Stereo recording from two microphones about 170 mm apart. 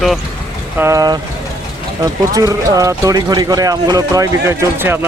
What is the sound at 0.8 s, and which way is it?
Speech, 20° right (ahead or behind).